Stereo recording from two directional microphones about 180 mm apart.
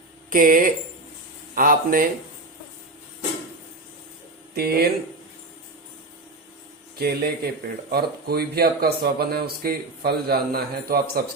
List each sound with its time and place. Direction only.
0.3 s speech: 50° right (ahead or behind)
4.5 s speech: 60° right (ahead or behind)
7.0 s speech: 60° right (ahead or behind)